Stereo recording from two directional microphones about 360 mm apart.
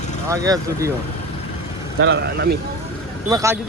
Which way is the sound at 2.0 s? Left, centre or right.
Right.